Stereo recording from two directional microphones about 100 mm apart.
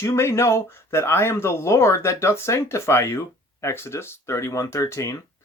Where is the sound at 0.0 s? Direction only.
30° left (ahead or behind).